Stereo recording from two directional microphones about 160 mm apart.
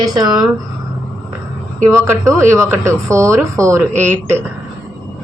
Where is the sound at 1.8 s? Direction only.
20° right (ahead or behind).